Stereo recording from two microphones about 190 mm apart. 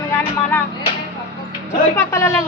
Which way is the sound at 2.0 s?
15° left (ahead or behind).